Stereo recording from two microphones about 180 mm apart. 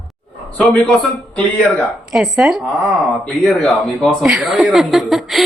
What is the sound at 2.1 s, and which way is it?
Speech, centre (ahead or behind).